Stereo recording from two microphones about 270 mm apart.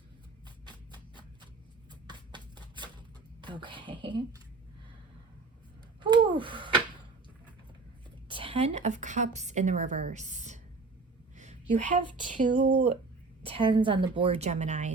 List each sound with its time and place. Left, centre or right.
0.4 s a sound: centre
3.4 s speech: centre
6.0 s a sound: centre
8.3 s a woman's voice: centre
11.9 s a woman's voice: right
13.4 s a woman's voice: centre